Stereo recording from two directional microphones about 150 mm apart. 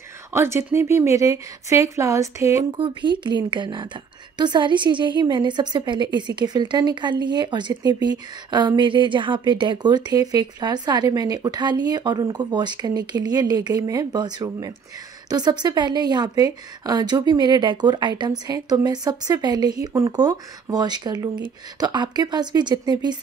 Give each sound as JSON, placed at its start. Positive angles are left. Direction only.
{"t": 0.3, "sound": "a woman's voice", "side_deg": -15}
{"t": 2.8, "sound": "a woman's voice", "side_deg": -30}